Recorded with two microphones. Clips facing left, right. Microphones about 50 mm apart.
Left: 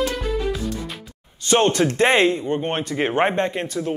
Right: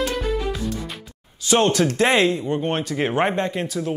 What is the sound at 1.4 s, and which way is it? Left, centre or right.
Speech, centre.